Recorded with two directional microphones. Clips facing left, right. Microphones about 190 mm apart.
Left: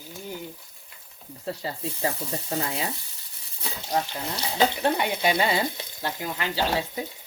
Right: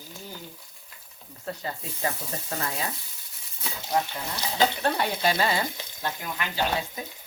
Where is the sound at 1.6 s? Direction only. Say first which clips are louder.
Left 2 dB; 30° left (ahead or behind).